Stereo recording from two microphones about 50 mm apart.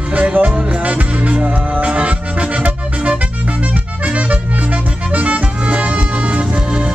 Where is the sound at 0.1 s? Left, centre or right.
Right.